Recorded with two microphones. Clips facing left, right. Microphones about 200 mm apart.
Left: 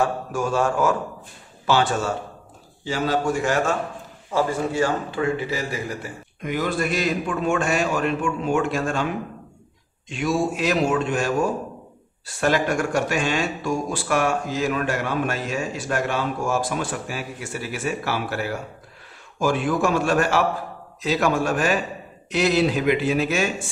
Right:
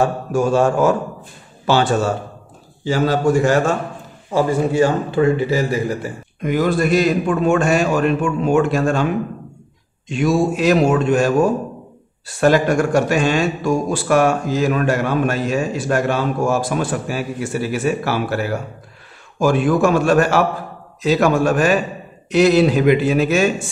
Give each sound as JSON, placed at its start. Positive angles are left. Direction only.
{"t": 0.0, "sound": "speech", "side_deg": -30}
{"t": 4.3, "sound": "a man's voice", "side_deg": -15}
{"t": 5.1, "sound": "speech", "side_deg": -35}
{"t": 10.0, "sound": "speech", "side_deg": -40}
{"t": 12.4, "sound": "speech", "side_deg": -40}
{"t": 19.4, "sound": "a man's voice", "side_deg": -45}